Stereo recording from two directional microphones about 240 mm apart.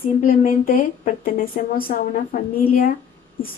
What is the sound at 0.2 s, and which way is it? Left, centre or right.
A woman's voice, left.